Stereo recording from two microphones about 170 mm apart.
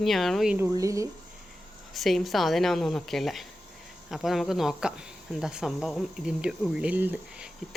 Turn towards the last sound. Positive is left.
turn(degrees=-10)  # may be behind; listen again after turning